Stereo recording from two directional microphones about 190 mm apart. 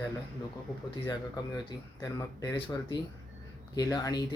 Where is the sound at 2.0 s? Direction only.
20° left (ahead or behind).